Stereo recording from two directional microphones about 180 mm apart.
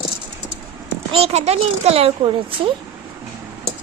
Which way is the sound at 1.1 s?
35° right (ahead or behind).